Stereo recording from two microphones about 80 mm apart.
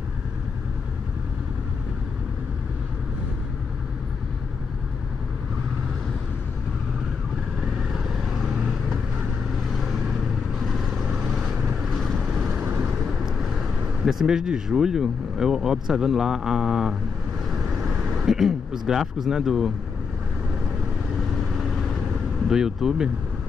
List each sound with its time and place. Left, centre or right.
7.7 s vehicle: centre
12.2 s vehicle: centre
14.0 s speech: centre
18.2 s speech: centre
22.5 s speech: centre